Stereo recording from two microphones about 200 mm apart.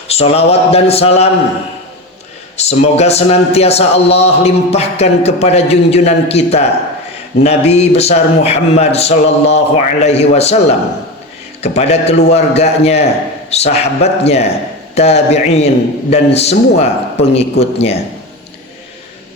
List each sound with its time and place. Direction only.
0.1 s a man's voice: 30° left (ahead or behind)
2.6 s a man's voice: 30° left (ahead or behind)